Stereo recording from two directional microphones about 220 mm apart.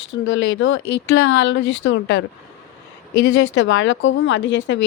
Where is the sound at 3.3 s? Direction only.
55° left (ahead or behind).